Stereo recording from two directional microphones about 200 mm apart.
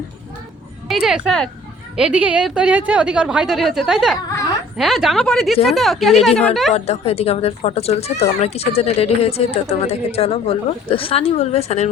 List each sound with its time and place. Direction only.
0.9 s a woman's voice: 5° right (ahead or behind)
6.7 s speech: 30° left (ahead or behind)